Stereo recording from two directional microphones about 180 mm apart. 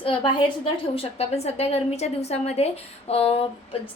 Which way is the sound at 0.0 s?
30° left (ahead or behind).